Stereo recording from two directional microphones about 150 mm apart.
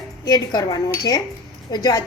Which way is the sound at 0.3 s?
25° left (ahead or behind).